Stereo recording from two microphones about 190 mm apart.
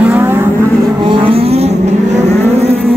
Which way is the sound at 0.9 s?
25° right (ahead or behind).